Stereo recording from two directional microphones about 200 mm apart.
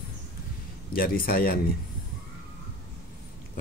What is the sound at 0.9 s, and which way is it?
Speech, 45° left (ahead or behind).